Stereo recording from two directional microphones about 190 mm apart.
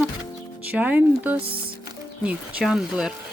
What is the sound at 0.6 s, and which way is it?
Speech, 10° right (ahead or behind).